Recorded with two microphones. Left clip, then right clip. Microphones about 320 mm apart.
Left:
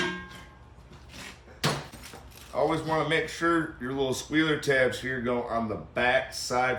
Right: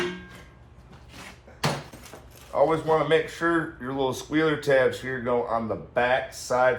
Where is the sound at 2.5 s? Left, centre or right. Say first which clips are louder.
Right 5 dB; centre.